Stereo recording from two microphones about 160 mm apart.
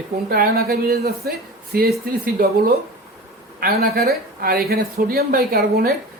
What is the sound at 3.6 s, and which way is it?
Speech, 75° right (ahead or behind).